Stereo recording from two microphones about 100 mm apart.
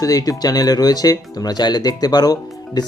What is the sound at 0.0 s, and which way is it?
Speech, 35° left (ahead or behind).